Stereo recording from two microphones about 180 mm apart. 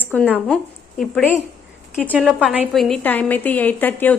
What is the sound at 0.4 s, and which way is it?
A woman's voice, 5° left (ahead or behind).